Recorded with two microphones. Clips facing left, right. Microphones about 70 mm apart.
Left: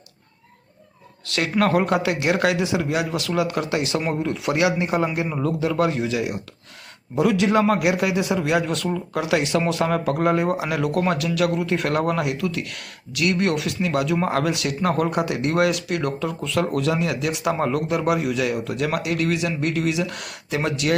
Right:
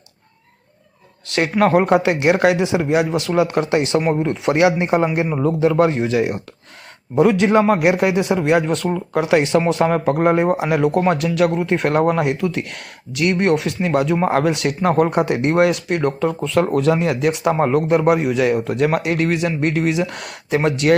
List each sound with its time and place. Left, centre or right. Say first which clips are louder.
1.3 s speech: right 5 dB; right